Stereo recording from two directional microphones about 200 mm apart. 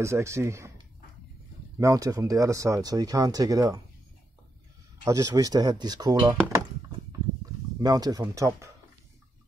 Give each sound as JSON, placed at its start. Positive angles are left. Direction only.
{"t": 0.0, "sound": "speech", "side_deg": -15}
{"t": 1.8, "sound": "speech", "side_deg": -15}
{"t": 5.0, "sound": "speech", "side_deg": -15}
{"t": 6.1, "sound": "speech", "side_deg": -10}
{"t": 7.8, "sound": "speech", "side_deg": -20}